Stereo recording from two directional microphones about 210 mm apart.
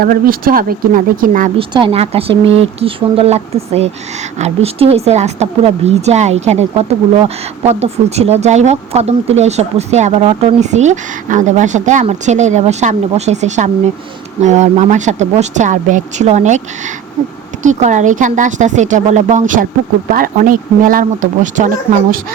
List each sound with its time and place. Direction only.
0.0 s speech: 45° right (ahead or behind)
1.5 s speech: 25° right (ahead or behind)